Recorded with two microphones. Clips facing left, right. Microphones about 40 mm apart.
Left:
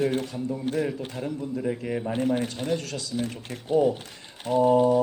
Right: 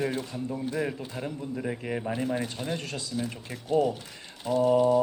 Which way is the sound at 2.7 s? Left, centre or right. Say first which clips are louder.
Left 5 dB; right.